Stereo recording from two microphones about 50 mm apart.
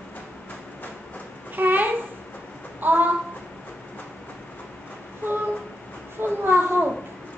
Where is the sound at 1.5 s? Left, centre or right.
Right.